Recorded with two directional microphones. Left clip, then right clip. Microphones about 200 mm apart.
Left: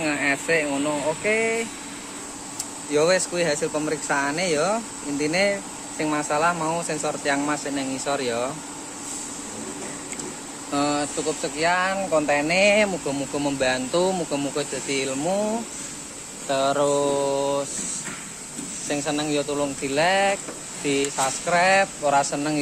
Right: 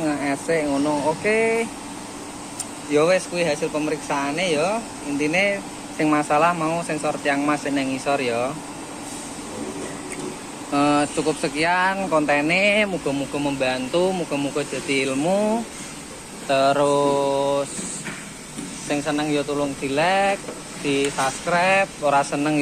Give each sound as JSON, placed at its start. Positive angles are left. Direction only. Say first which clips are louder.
{"t": 0.0, "sound": "speech", "louder": "left 1 dB", "side_deg": 5}
{"t": 3.1, "sound": "speech", "louder": "right 1 dB", "side_deg": 25}
{"t": 5.9, "sound": "speech", "louder": "right 5 dB", "side_deg": 0}
{"t": 10.9, "sound": "speech", "louder": "right 5 dB", "side_deg": 0}
{"t": 13.4, "sound": "speech", "louder": "left 1 dB", "side_deg": 30}
{"t": 16.4, "sound": "speech", "louder": "right 3 dB", "side_deg": 10}
{"t": 18.9, "sound": "speech", "louder": "right 2 dB", "side_deg": 20}